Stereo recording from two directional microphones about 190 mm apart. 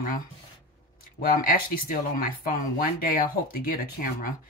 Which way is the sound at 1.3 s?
50° left (ahead or behind).